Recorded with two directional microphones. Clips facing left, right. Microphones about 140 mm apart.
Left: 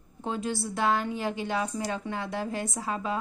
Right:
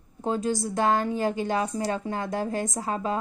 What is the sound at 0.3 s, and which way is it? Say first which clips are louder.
A woman's voice: right 5 dB; 40° right (ahead or behind).